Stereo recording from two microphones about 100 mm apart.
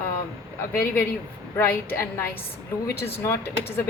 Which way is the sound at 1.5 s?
20° left (ahead or behind).